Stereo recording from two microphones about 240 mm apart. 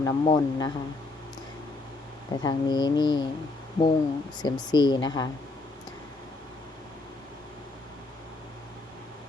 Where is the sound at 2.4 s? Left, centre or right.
Centre.